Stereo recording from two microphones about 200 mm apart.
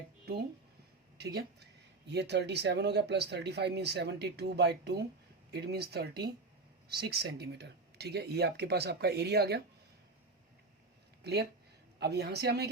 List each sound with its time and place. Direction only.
1.2 s speech: 55° right (ahead or behind)
11.2 s speech: 55° right (ahead or behind)